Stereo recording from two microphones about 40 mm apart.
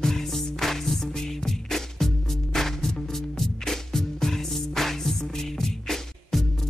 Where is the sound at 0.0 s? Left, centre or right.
Centre.